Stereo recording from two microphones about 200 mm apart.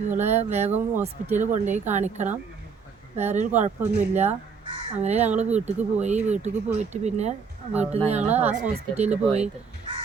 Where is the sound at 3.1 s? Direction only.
35° right (ahead or behind).